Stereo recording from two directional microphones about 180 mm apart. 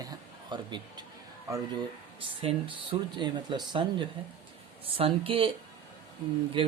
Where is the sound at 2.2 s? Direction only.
30° right (ahead or behind).